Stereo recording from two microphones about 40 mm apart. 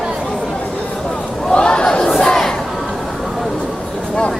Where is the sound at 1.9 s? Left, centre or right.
Centre.